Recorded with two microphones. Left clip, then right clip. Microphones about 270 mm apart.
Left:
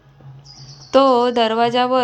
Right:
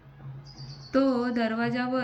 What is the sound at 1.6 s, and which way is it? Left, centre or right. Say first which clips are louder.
Speech: left 14 dB; centre.